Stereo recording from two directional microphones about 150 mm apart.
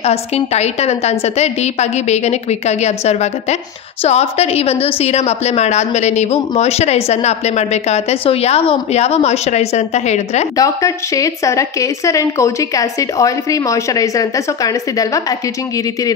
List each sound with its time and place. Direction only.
0.0 s a woman's voice: 45° left (ahead or behind)
10.6 s a woman's voice: 25° left (ahead or behind)